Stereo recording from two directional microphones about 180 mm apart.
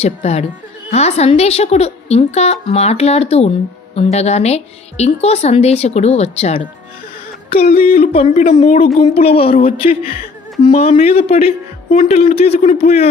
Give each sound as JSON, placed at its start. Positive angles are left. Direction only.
{"t": 0.0, "sound": "a woman's voice", "side_deg": 35}
{"t": 7.8, "sound": "a woman's voice", "side_deg": 35}